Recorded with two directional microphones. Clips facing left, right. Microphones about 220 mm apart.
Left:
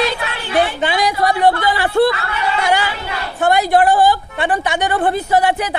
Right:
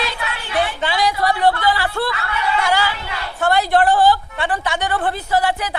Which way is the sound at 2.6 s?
20° left (ahead or behind).